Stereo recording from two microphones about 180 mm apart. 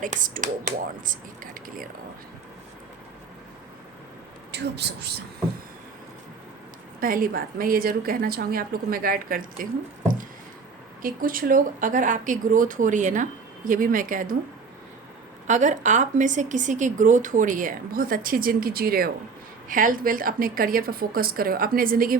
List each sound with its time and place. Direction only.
0.0 s speech: 45° right (ahead or behind)
4.5 s speech: 70° right (ahead or behind)
7.0 s speech: 55° right (ahead or behind)
11.0 s speech: 50° right (ahead or behind)
15.4 s speech: 45° right (ahead or behind)